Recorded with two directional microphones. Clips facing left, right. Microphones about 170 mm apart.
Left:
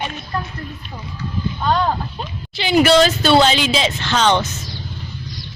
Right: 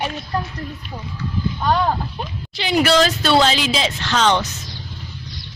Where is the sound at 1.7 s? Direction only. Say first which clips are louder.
Even; 10° right (ahead or behind).